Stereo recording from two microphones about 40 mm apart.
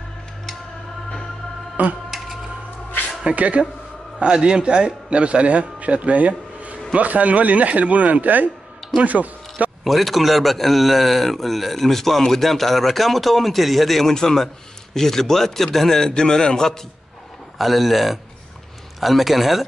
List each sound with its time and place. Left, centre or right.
2.0 s a sound: centre
3.3 s speech: right
4.2 s a man's voice: right
9.8 s a man's voice: centre
16.1 s speech: centre
17.6 s a man's voice: centre